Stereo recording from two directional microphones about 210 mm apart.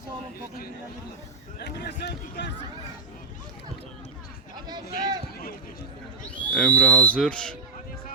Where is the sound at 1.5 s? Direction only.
50° left (ahead or behind).